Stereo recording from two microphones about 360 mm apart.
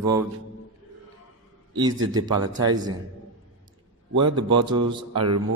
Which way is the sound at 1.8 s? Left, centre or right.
Centre.